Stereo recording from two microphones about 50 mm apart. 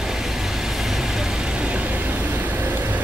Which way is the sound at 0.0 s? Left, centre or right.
Centre.